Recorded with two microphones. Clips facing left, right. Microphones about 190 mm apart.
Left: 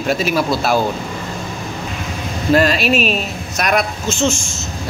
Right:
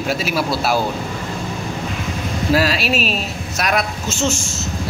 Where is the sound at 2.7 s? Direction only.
50° left (ahead or behind).